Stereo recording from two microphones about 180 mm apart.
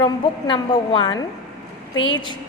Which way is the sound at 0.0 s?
25° left (ahead or behind).